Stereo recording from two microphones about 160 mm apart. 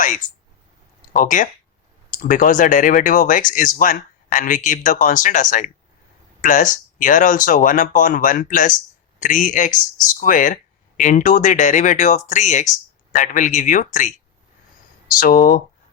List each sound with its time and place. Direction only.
1.1 s speech: 55° left (ahead or behind)
15.2 s speech: 65° left (ahead or behind)